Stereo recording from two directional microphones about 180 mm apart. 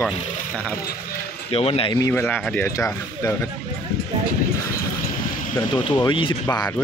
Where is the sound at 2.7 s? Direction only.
15° left (ahead or behind).